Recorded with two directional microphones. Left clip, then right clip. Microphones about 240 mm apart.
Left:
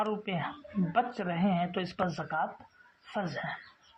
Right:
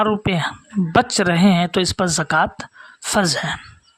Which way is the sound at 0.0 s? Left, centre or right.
Right.